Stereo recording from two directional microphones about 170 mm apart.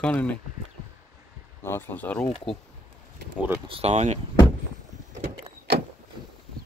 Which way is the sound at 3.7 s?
35° right (ahead or behind).